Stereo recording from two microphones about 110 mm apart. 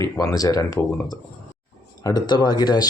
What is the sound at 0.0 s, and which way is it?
Speech, 30° left (ahead or behind).